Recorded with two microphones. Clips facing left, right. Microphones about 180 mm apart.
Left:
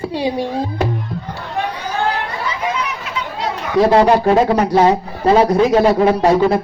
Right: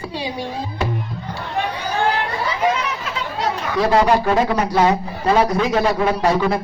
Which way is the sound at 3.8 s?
30° left (ahead or behind).